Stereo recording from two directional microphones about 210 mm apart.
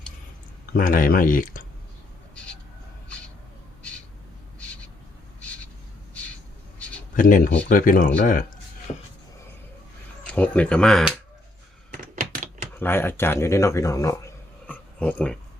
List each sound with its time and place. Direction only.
0.7 s speech: 40° left (ahead or behind)
7.2 s speech: 40° left (ahead or behind)
10.2 s speech: 5° left (ahead or behind)
11.9 s typewriter: 40° right (ahead or behind)
12.7 s speech: 10° left (ahead or behind)